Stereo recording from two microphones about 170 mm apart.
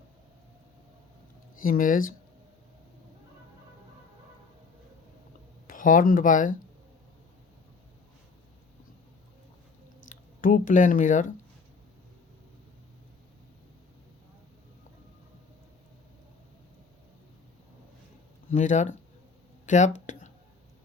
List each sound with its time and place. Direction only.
1.6 s speech: 55° left (ahead or behind)
5.6 s speech: 50° left (ahead or behind)
10.1 s speech: 50° left (ahead or behind)
18.5 s speech: 45° left (ahead or behind)